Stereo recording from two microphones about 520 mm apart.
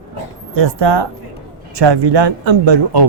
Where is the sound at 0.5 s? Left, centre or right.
Right.